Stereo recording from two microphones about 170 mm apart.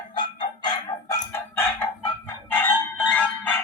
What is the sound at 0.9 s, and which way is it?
Chicken, 15° left (ahead or behind).